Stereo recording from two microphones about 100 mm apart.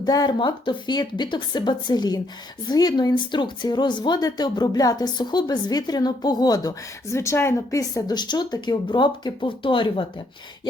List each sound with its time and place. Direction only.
0.0 s speech: 40° left (ahead or behind)
0.3 s speech: 55° left (ahead or behind)